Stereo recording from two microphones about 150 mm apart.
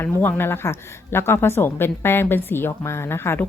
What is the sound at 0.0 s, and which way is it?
Speech, 15° left (ahead or behind).